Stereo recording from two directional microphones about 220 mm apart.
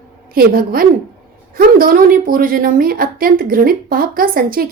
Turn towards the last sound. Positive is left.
turn(degrees=-40)  # may be behind; listen again after turning